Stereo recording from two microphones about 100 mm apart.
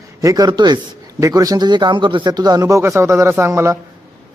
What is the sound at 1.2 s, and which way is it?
A man's voice, 35° right (ahead or behind).